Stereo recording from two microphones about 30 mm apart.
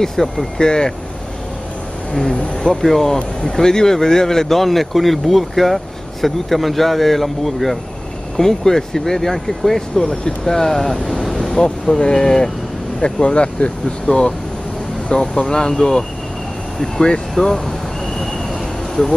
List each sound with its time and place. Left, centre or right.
0.0 s speech: centre
0.6 s speech: left
2.5 s speech: left
2.8 s speech: centre
3.4 s speech: left
4.6 s speech: centre
8.4 s speech: centre
13.0 s speech: left
15.1 s speech: left
17.0 s speech: left
17.5 s a sound: centre